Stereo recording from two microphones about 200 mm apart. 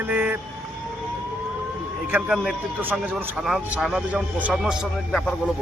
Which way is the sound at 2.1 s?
5° right (ahead or behind).